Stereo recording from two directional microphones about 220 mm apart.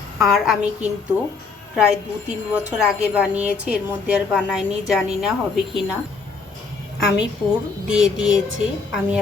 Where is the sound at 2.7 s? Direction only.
5° right (ahead or behind).